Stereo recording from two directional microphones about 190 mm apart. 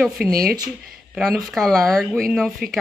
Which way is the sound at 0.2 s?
50° right (ahead or behind).